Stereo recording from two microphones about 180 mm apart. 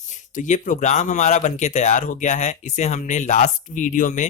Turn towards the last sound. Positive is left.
turn(degrees=45)  # may be behind; listen again after turning